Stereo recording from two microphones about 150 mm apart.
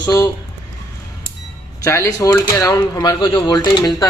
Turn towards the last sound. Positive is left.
turn(degrees=25)  # may be behind; listen again after turning